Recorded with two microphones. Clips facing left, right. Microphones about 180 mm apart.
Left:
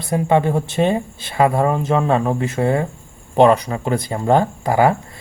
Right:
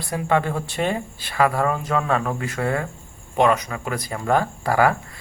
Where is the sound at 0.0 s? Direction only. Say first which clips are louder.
Left 5 dB; 20° left (ahead or behind).